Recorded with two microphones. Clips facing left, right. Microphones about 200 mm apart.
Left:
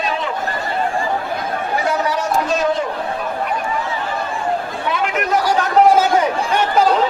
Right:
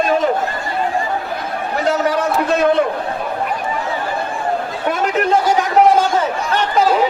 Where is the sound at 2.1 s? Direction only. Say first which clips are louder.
Right 2 dB; 60° right (ahead or behind).